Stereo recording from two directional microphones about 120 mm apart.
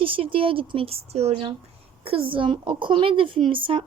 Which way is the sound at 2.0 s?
50° right (ahead or behind).